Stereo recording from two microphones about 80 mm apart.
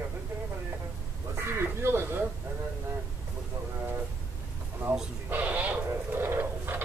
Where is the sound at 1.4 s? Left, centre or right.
Right.